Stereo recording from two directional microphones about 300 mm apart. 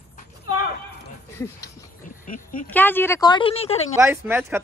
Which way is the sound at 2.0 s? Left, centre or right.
Left.